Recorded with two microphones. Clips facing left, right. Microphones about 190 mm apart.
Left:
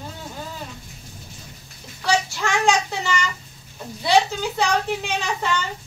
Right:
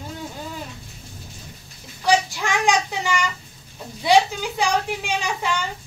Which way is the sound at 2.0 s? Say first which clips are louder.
Right 2 dB; 15° right (ahead or behind).